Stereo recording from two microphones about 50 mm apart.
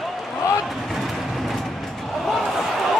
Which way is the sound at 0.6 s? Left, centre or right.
Centre.